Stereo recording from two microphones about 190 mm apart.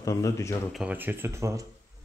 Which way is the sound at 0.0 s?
15° left (ahead or behind).